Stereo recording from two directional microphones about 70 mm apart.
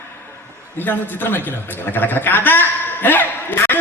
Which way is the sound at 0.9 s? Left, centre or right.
Left.